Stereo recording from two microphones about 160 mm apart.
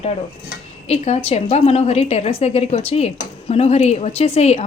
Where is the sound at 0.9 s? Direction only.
40° left (ahead or behind).